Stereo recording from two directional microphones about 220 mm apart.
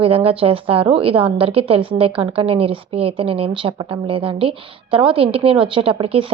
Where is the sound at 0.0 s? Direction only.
25° right (ahead or behind).